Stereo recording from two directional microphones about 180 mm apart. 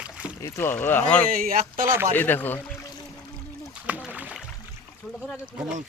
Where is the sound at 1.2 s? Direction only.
50° right (ahead or behind).